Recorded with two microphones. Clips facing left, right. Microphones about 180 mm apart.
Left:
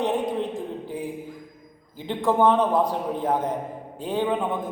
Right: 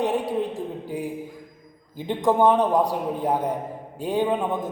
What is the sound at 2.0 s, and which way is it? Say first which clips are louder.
Speech: right 1 dB; 15° right (ahead or behind).